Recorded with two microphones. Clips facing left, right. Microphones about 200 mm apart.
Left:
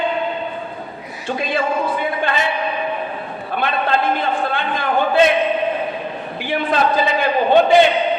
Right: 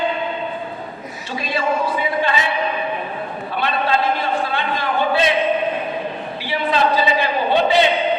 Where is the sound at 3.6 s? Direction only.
50° left (ahead or behind).